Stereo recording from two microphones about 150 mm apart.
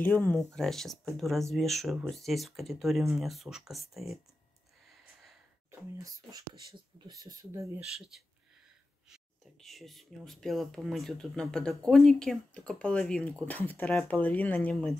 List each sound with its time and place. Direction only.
0.0 s speech: 15° left (ahead or behind)
0.6 s speech: centre (ahead or behind)
5.7 s speech: 20° right (ahead or behind)
9.1 s speech: centre (ahead or behind)